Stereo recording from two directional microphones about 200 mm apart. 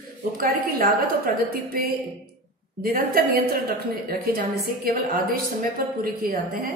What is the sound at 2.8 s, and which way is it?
A woman's voice, 50° right (ahead or behind).